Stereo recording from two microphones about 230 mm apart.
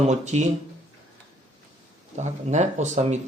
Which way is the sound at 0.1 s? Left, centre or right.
Right.